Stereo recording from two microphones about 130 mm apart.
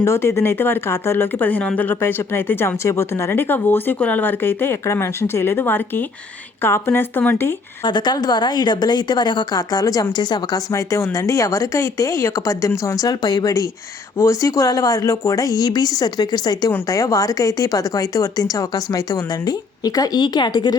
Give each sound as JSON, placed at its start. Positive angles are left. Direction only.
{"t": 0.0, "sound": "speech", "side_deg": 20}
{"t": 7.9, "sound": "speech", "side_deg": 35}